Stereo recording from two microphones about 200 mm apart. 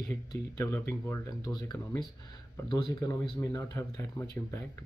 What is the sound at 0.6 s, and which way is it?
A man's voice, 15° left (ahead or behind).